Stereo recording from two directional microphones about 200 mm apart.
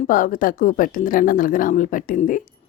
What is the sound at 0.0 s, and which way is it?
A woman's voice, 40° left (ahead or behind).